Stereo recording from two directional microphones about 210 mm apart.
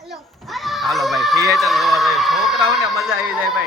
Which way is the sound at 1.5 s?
Centre (ahead or behind).